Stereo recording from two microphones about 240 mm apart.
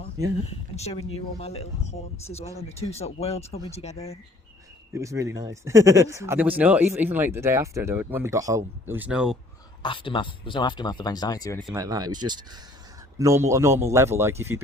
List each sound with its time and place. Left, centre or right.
0.4 s speech: left
4.9 s speech: centre
9.8 s speech: left
11.6 s speech: centre